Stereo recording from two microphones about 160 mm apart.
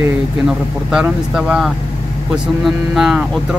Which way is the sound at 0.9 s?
5° right (ahead or behind).